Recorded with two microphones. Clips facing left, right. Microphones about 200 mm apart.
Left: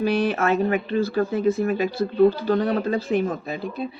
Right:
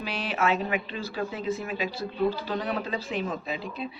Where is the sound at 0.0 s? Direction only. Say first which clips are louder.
Left 8 dB; 50° left (ahead or behind).